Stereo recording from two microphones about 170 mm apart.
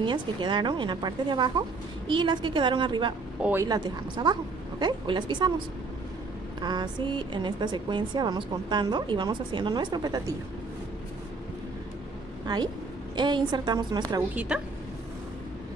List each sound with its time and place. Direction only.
0.0 s speech: 30° right (ahead or behind)
6.6 s speech: 25° right (ahead or behind)
13.1 s speech: 25° right (ahead or behind)
14.3 s a woman's voice: 5° right (ahead or behind)